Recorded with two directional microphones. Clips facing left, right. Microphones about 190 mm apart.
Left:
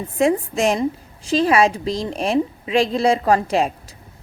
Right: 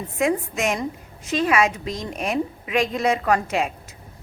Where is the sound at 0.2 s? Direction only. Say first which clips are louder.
Left 4 dB; 30° left (ahead or behind).